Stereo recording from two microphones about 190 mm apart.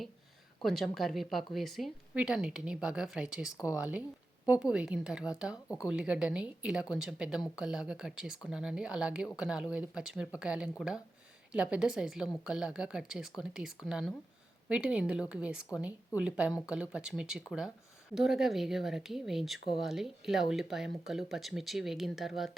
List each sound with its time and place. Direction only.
0.6 s a woman's voice: centre (ahead or behind)
5.6 s speech: 15° left (ahead or behind)
5.9 s a woman's voice: 5° right (ahead or behind)